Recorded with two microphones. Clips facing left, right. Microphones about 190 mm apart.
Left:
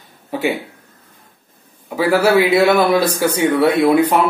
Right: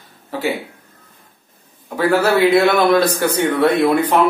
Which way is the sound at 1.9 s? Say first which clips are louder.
Left 1 dB; 10° left (ahead or behind).